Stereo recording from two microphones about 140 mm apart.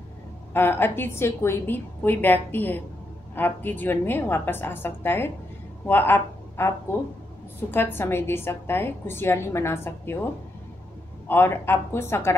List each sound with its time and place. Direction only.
0.5 s a woman's voice: 15° left (ahead or behind)
11.2 s a woman's voice: 15° left (ahead or behind)